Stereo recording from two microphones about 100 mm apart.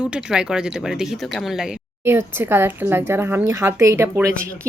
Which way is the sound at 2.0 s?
25° right (ahead or behind).